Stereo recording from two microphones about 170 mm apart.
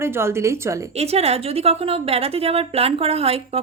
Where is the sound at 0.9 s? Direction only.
40° right (ahead or behind).